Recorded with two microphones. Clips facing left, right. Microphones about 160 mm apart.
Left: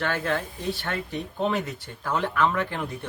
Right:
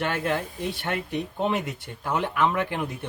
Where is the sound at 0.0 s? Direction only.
20° right (ahead or behind).